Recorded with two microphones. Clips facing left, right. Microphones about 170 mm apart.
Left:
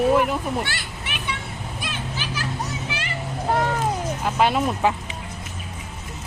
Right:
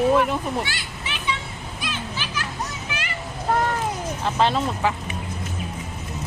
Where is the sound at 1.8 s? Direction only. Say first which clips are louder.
Right 1 dB; 45° left (ahead or behind).